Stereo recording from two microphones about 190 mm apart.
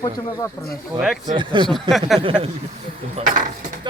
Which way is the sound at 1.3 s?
25° right (ahead or behind).